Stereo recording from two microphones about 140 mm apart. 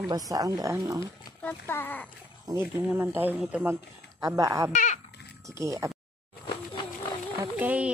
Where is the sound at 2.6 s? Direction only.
15° right (ahead or behind).